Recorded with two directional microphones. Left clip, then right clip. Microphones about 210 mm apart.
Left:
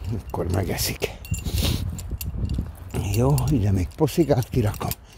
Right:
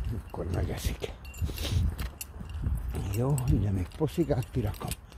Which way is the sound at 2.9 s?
45° left (ahead or behind).